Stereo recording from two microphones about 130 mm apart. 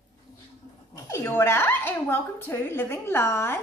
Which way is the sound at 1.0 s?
20° left (ahead or behind).